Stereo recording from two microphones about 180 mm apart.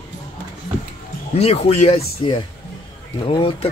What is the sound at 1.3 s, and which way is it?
Speech, 35° left (ahead or behind).